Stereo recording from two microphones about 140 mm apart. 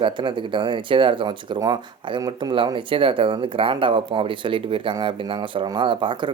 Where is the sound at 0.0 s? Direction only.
35° right (ahead or behind).